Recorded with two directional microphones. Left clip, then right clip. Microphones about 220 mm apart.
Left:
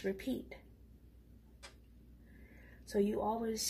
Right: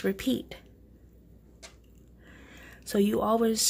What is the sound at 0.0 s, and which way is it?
Speech, 30° right (ahead or behind).